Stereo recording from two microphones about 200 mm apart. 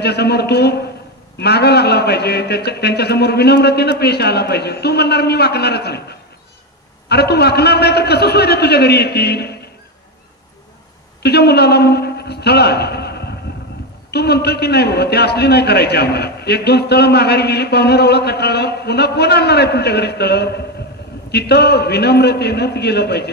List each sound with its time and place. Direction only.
0.0 s a man's voice: 55° left (ahead or behind)
11.2 s a man's voice: 55° left (ahead or behind)